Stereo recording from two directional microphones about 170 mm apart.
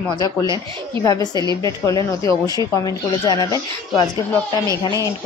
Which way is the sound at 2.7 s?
25° left (ahead or behind).